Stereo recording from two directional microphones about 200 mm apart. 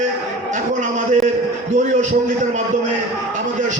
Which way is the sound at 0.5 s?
40° right (ahead or behind).